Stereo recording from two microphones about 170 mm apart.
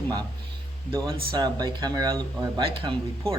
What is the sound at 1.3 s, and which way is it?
Speech, 25° right (ahead or behind).